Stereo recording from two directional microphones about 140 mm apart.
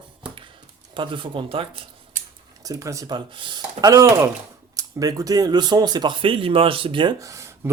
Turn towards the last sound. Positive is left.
turn(degrees=-20)  # may be behind; listen again after turning